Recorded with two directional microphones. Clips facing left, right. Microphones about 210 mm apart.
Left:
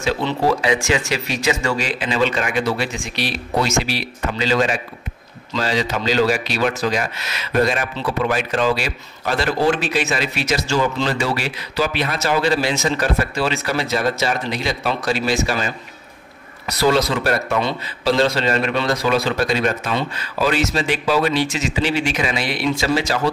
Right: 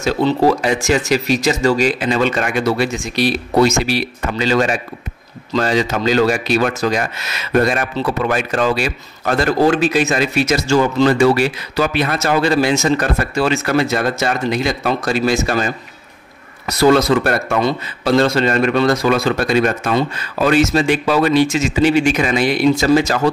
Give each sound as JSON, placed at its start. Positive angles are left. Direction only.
{"t": 0.0, "sound": "a man's voice", "side_deg": -45}